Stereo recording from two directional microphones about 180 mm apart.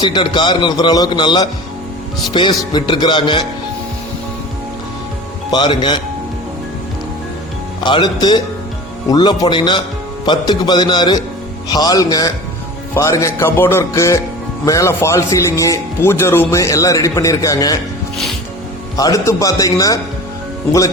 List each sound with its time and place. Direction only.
0.0 s a man's voice: 25° left (ahead or behind)
5.5 s a man's voice: 25° left (ahead or behind)
7.9 s a man's voice: 25° left (ahead or behind)
18.9 s a man's voice: 20° left (ahead or behind)